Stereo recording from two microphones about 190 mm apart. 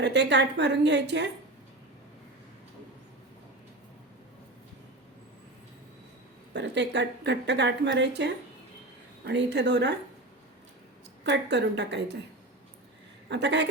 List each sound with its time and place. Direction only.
0.0 s a woman's voice: 65° right (ahead or behind)
6.5 s a woman's voice: 65° right (ahead or behind)
11.2 s a woman's voice: 65° right (ahead or behind)
13.2 s a woman's voice: 65° right (ahead or behind)